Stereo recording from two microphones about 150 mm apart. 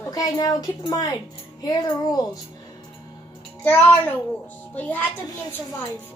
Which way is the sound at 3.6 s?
15° left (ahead or behind).